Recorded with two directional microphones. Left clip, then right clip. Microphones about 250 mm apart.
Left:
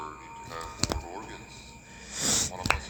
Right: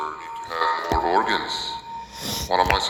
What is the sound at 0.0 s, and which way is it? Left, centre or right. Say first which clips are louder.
Music: right 11 dB; right.